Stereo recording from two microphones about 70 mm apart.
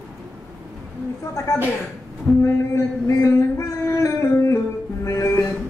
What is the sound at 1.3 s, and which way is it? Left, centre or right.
Speech, left.